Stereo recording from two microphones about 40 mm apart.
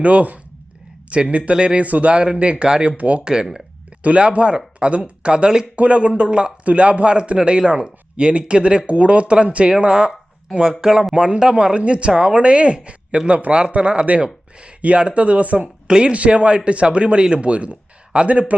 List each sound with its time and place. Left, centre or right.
0.0 s speech: right
3.0 s speech: right
15.9 s speech: right
16.1 s speech: right